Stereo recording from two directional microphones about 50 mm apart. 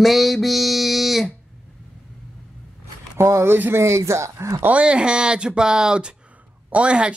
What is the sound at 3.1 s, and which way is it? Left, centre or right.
Speech, right.